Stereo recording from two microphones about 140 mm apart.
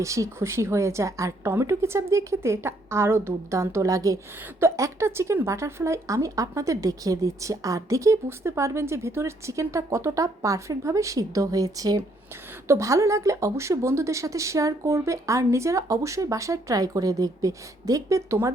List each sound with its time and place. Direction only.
0.0 s a woman's voice: 20° right (ahead or behind)